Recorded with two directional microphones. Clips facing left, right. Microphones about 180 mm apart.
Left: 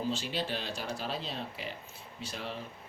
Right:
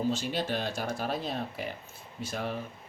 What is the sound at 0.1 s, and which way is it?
Speech, 45° right (ahead or behind).